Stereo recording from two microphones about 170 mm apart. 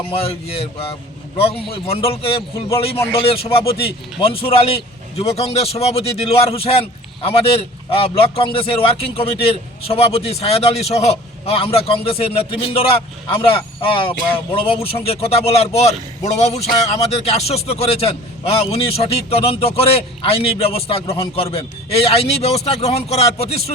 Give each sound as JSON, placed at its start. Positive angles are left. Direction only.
{"t": 0.1, "sound": "a man's voice", "side_deg": 35}
{"t": 2.6, "sound": "a man's voice", "side_deg": 15}
{"t": 3.2, "sound": "a man's voice", "side_deg": 35}